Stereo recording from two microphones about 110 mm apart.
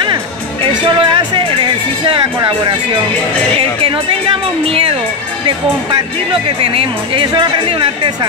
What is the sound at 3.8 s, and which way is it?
Speech, 55° right (ahead or behind).